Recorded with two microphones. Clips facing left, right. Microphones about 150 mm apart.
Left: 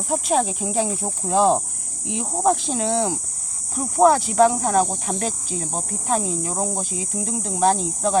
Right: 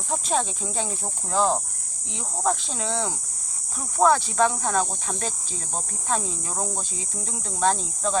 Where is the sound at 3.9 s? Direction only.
15° left (ahead or behind).